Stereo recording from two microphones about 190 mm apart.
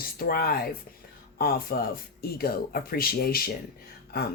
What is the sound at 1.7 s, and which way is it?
Speech, 55° left (ahead or behind).